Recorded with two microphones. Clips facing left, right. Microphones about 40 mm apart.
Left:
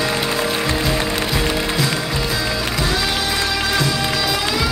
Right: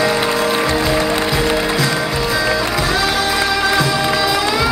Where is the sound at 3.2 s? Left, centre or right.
Centre.